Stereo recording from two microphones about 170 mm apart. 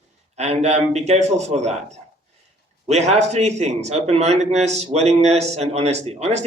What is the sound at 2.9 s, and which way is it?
Speech, 40° right (ahead or behind).